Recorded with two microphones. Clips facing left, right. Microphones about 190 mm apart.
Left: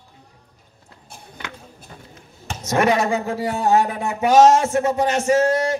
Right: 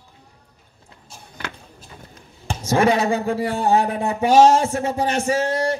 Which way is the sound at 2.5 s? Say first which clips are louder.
Right 1 dB; 30° right (ahead or behind).